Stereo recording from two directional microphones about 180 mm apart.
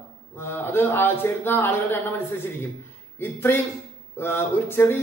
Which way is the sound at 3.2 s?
10° left (ahead or behind).